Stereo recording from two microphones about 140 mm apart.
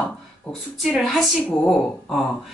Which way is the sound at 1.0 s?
Centre (ahead or behind).